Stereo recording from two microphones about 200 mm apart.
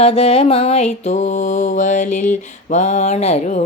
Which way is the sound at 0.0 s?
30° left (ahead or behind).